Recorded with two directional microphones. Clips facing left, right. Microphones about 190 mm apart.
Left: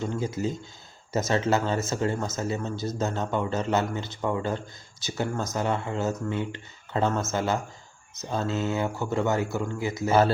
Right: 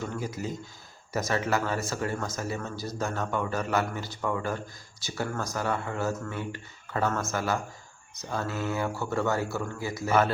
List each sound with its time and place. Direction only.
0.0 s speech: 25° left (ahead or behind)